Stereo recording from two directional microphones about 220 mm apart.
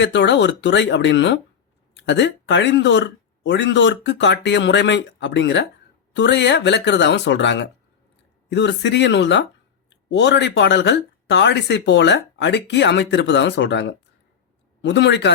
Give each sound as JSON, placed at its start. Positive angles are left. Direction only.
{"t": 0.0, "sound": "speech", "side_deg": 50}